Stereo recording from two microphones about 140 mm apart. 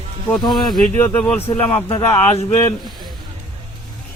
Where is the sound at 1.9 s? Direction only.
45° left (ahead or behind).